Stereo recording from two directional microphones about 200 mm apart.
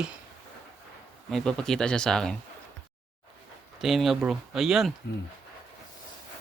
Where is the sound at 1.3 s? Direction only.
Centre (ahead or behind).